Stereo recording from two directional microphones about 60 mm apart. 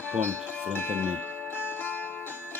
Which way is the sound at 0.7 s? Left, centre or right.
Left.